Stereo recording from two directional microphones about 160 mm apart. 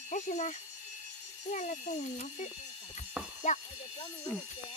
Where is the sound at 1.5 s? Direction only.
50° left (ahead or behind).